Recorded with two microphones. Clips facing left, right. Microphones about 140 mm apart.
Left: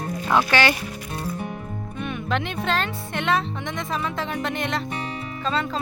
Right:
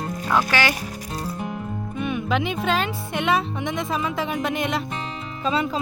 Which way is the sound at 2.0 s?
5° right (ahead or behind).